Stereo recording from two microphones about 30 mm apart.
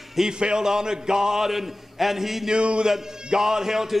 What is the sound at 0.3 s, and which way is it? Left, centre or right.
A man's voice, right.